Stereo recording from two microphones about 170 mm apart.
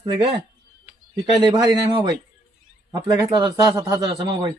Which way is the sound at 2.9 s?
20° right (ahead or behind).